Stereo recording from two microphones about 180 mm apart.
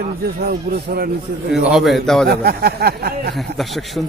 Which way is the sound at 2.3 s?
60° right (ahead or behind).